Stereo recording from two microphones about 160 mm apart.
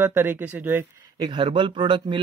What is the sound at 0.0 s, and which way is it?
Speech, 15° right (ahead or behind).